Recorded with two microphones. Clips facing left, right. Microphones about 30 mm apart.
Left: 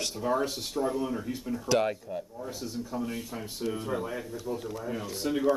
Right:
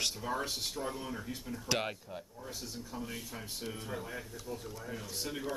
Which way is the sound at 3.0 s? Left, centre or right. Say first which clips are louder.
Left 7 dB; centre.